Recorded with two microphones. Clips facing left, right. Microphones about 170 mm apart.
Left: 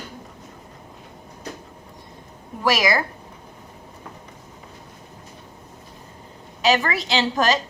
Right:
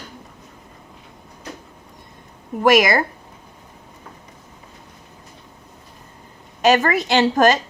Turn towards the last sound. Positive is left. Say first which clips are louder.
# right 5 dB
turn(degrees=-50)  # may be behind; listen again after turning